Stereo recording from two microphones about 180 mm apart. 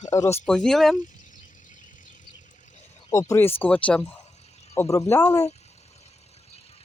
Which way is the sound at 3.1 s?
15° left (ahead or behind).